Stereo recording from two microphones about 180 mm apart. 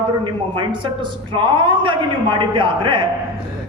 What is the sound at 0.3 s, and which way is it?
A man's voice, 25° right (ahead or behind).